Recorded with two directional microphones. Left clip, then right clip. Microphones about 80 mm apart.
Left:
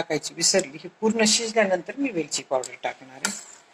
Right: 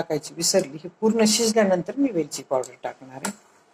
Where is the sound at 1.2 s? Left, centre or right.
Right.